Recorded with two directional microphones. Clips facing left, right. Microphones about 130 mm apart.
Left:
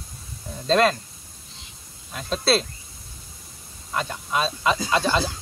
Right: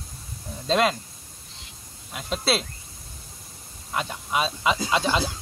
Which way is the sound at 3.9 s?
15° right (ahead or behind).